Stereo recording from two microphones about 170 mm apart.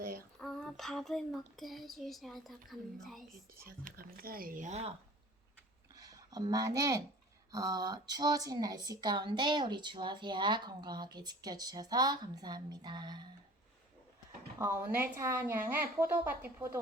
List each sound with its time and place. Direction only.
0.3 s speech: 5° left (ahead or behind)
3.7 s speech: 60° right (ahead or behind); by 4.9 s 40° right (ahead or behind)
5.9 s a sound: 20° right (ahead or behind)
7.5 s speech: 20° right (ahead or behind)
14.6 s a woman's voice: 15° right (ahead or behind)